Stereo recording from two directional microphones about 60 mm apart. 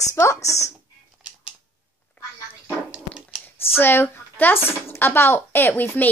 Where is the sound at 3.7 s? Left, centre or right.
Left.